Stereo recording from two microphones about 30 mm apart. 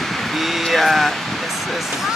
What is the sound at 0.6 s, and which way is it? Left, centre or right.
Speech, centre.